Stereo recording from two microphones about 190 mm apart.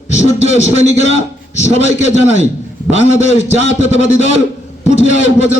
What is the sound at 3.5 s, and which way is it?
Speech, 35° left (ahead or behind).